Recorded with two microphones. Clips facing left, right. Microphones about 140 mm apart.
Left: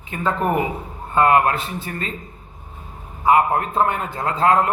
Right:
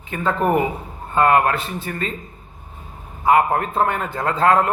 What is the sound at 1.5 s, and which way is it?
Speech, 30° left (ahead or behind).